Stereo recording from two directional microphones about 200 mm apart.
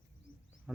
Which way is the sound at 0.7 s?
5° right (ahead or behind).